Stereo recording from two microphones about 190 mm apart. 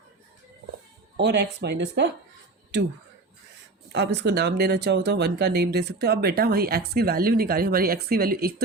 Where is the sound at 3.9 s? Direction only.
60° right (ahead or behind).